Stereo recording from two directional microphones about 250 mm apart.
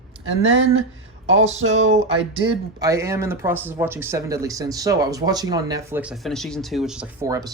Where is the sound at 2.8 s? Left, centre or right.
Centre.